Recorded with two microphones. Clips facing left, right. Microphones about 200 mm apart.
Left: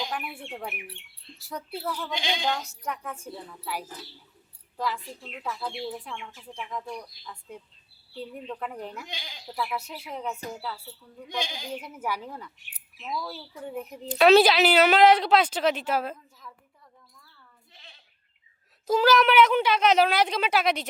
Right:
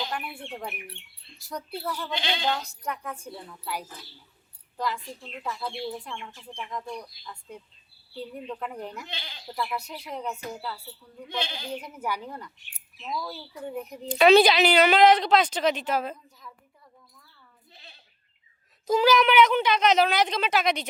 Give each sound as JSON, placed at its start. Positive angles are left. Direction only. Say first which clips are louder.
{"t": 0.1, "sound": "a woman's voice", "louder": "even", "side_deg": 5}
{"t": 9.0, "sound": "a woman's voice", "louder": "right 1 dB", "side_deg": 10}
{"t": 11.3, "sound": "a woman's voice", "louder": "even", "side_deg": 10}
{"t": 17.7, "sound": "bleat", "louder": "right 3 dB", "side_deg": -35}
{"t": 18.9, "sound": "a woman's voice", "louder": "even", "side_deg": 0}